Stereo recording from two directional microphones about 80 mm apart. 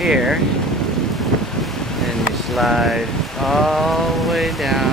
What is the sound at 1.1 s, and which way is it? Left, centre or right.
Wind, centre.